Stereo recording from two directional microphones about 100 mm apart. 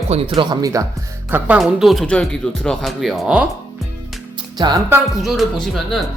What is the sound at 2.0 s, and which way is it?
Speech, 10° left (ahead or behind).